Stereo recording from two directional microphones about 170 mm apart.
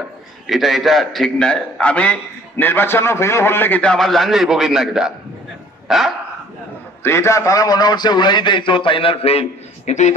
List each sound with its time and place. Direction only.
0.5 s a man's voice: centre (ahead or behind)
5.9 s dog: centre (ahead or behind)
7.0 s a man's voice: 15° left (ahead or behind); by 10.1 s 45° left (ahead or behind)